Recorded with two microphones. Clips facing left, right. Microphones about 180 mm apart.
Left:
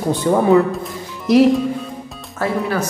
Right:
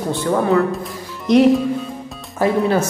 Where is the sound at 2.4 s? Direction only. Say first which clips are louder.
Right 4 dB; 25° right (ahead or behind).